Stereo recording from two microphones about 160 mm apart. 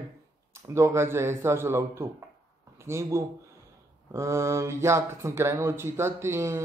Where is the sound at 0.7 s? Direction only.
15° right (ahead or behind).